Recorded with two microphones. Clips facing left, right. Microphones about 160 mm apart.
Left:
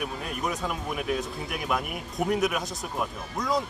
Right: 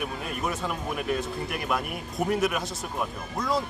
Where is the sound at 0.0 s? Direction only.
Centre (ahead or behind).